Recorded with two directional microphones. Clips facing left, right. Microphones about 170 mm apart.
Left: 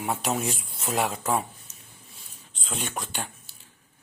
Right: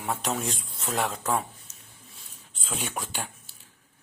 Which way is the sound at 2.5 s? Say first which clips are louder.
Left 1 dB; 5° right (ahead or behind).